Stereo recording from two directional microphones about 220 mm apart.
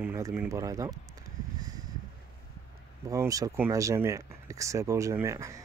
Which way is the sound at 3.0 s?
15° right (ahead or behind).